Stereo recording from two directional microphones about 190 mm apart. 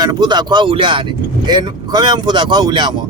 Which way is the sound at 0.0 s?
20° right (ahead or behind).